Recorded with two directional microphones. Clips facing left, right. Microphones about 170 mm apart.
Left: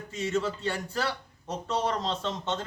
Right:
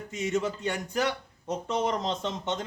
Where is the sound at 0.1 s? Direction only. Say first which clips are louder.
Even; 15° right (ahead or behind).